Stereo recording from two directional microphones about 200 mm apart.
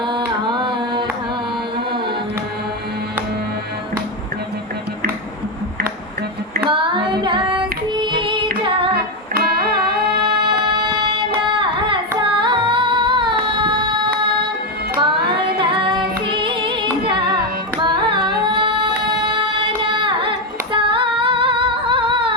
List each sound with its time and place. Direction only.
0.0 s carnatic music: 25° right (ahead or behind)
6.7 s child singing: 25° right (ahead or behind)
8.6 s singing: 25° right (ahead or behind)
9.3 s music: 50° right (ahead or behind)
10.7 s music: 25° right (ahead or behind)
11.5 s singing: 25° right (ahead or behind)
14.9 s music: 25° right (ahead or behind)
20.7 s female singing: 25° right (ahead or behind)